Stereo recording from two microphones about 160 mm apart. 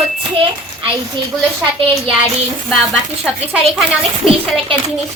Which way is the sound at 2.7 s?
Centre (ahead or behind).